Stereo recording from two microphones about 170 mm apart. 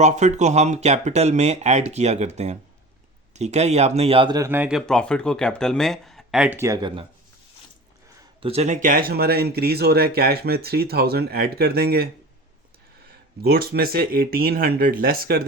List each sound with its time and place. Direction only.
0.0 s speech: 45° right (ahead or behind)
4.4 s speech: 10° right (ahead or behind)
4.9 s speech: 5° left (ahead or behind)
6.6 s speech: 20° right (ahead or behind)
8.4 s speech: 35° right (ahead or behind); by 12.0 s 65° right (ahead or behind)
13.4 s speech: 65° right (ahead or behind)